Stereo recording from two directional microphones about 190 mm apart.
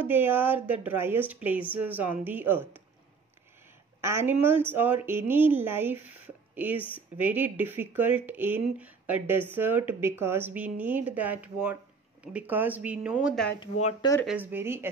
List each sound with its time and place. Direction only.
0.0 s speech: 10° right (ahead or behind)
4.0 s speech: 15° right (ahead or behind)
13.6 s speech: 20° left (ahead or behind)
14.2 s speech: 10° right (ahead or behind)